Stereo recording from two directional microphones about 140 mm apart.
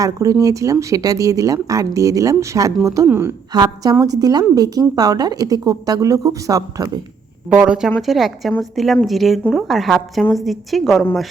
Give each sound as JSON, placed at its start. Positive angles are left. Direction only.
{"t": 0.0, "sound": "a woman's voice", "side_deg": -25}
{"t": 3.5, "sound": "speech", "side_deg": -30}
{"t": 7.5, "sound": "a woman's voice", "side_deg": -5}